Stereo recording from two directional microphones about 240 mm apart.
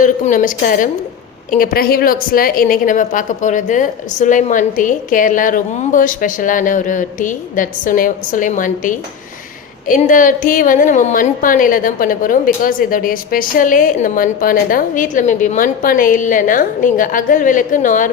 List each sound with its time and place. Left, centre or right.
0.0 s a woman's voice: left